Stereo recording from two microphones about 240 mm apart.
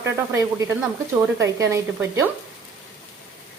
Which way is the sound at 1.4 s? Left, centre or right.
Centre.